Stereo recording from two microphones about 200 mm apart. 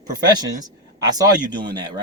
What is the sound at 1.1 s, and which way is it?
Speech, 20° right (ahead or behind).